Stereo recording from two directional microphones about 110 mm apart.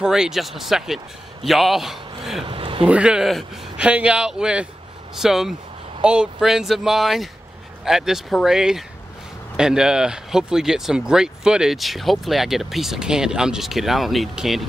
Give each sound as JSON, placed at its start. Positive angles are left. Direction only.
{"t": 0.0, "sound": "speech", "side_deg": -5}
{"t": 2.4, "sound": "speech", "side_deg": -55}
{"t": 2.8, "sound": "a man's voice", "side_deg": -10}